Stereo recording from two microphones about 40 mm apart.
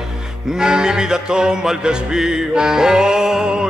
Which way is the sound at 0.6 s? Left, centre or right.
Centre.